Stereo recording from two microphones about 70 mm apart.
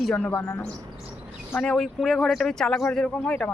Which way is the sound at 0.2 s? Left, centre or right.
Left.